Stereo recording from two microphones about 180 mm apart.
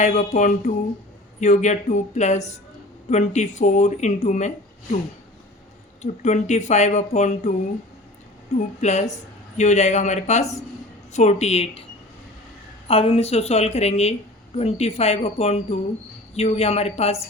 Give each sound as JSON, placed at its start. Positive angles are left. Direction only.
{"t": 0.0, "sound": "a woman's voice", "side_deg": 40}
{"t": 6.0, "sound": "a woman's voice", "side_deg": 40}
{"t": 8.5, "sound": "a woman's voice", "side_deg": 40}
{"t": 12.9, "sound": "a woman's voice", "side_deg": 30}